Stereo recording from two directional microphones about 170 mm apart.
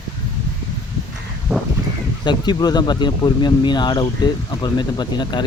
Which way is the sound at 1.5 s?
5° right (ahead or behind).